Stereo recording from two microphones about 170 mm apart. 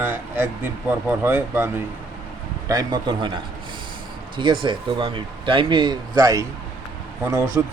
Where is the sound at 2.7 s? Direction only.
25° right (ahead or behind).